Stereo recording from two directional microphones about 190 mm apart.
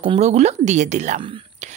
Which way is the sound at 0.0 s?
30° right (ahead or behind).